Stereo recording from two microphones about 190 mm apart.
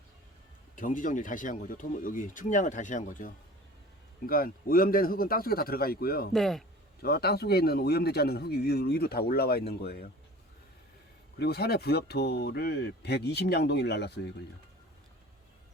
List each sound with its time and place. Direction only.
0.8 s speech: 45° left (ahead or behind)
6.3 s a man's voice: centre (ahead or behind)
7.0 s a man's voice: 55° left (ahead or behind)
11.3 s a man's voice: 55° left (ahead or behind)